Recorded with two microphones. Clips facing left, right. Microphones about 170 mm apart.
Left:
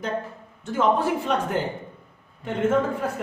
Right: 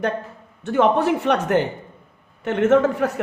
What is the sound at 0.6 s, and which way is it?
A man's voice, 70° right (ahead or behind).